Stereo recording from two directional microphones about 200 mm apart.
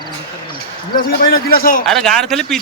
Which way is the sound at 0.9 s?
50° left (ahead or behind).